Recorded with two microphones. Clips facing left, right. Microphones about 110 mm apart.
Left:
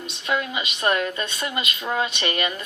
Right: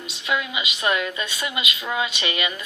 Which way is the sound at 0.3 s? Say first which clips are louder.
Even; 35° left (ahead or behind).